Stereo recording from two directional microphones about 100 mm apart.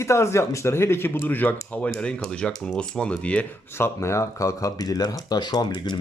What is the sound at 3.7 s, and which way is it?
Speech, 25° left (ahead or behind).